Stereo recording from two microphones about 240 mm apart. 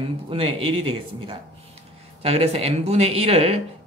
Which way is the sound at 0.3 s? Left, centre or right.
Right.